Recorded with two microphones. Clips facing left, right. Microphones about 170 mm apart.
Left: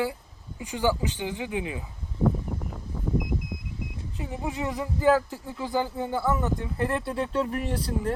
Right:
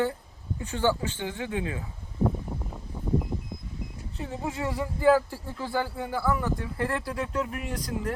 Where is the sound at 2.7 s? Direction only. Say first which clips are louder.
Left 2 dB; 5° right (ahead or behind).